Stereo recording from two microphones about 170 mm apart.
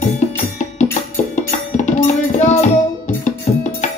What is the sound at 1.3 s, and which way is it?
Music, 45° left (ahead or behind).